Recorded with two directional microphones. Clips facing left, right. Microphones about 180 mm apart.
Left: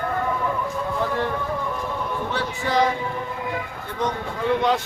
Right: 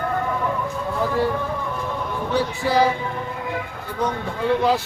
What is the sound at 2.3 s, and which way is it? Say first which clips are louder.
Speech: right 4 dB; 10° right (ahead or behind).